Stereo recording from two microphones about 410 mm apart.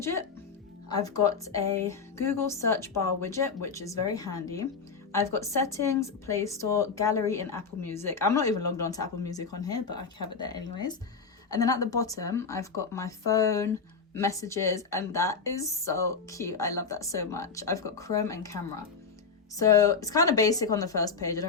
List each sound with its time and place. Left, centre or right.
0.9 s a woman's voice: centre
19.5 s a woman's voice: centre